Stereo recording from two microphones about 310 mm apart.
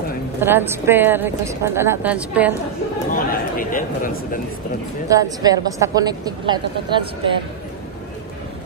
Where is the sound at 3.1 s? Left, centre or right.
Left.